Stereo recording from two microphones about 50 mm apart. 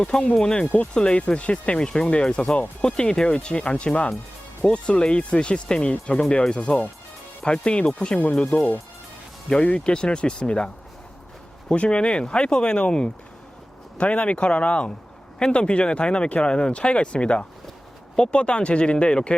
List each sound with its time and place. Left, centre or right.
0.0 s speech: centre
11.7 s speech: left